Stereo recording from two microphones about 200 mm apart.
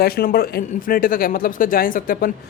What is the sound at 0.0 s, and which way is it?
Speech, 50° left (ahead or behind).